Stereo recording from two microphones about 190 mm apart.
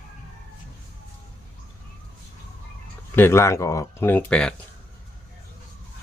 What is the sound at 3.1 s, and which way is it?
Speech, 15° left (ahead or behind).